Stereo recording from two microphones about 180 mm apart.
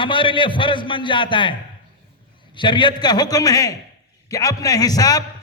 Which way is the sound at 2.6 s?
25° left (ahead or behind).